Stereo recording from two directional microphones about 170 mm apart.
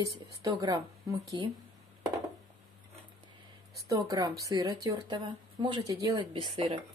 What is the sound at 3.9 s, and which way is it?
Speech, 20° right (ahead or behind).